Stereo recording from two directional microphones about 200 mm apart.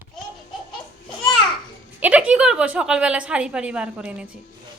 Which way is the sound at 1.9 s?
5° right (ahead or behind).